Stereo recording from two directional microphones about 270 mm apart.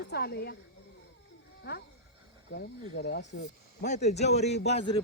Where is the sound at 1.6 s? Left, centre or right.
Left.